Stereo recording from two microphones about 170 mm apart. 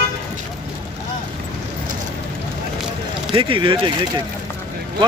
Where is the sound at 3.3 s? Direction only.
30° right (ahead or behind).